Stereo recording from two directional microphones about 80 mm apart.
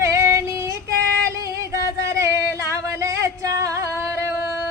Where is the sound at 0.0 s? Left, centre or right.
Right.